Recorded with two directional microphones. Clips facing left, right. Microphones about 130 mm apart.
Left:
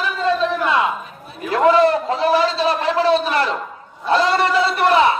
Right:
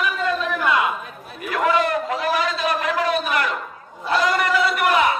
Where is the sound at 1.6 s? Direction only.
30° left (ahead or behind).